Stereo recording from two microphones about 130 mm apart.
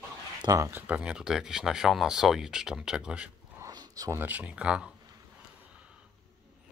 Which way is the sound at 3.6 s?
30° right (ahead or behind).